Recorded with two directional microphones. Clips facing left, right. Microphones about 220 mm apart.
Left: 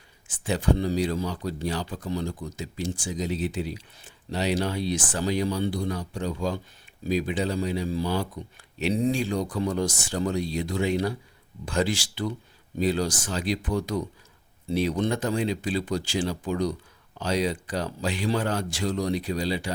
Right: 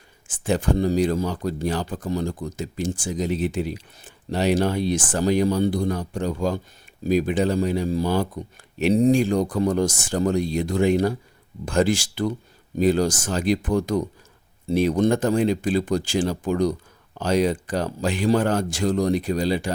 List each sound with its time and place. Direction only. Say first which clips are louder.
0.3 s speech: right 3 dB; 50° right (ahead or behind)